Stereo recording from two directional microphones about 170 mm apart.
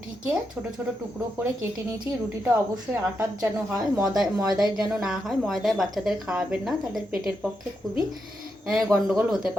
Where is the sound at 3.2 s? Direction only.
15° right (ahead or behind).